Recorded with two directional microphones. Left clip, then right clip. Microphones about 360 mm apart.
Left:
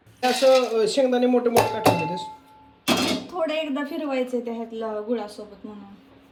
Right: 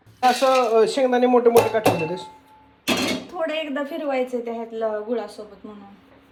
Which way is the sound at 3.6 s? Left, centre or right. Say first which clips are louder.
Right 1 dB; left.